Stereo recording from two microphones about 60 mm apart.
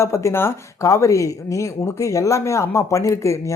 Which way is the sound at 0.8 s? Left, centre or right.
Left.